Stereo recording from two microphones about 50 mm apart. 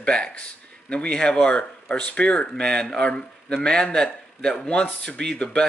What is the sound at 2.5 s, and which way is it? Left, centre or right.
A man's voice, centre.